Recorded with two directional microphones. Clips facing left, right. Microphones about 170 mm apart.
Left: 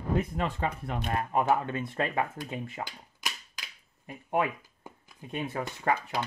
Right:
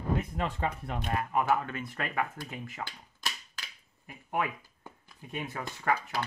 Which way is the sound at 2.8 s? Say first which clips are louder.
Left 1 dB; 15° left (ahead or behind).